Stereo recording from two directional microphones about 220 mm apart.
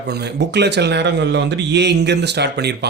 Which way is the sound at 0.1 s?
50° right (ahead or behind).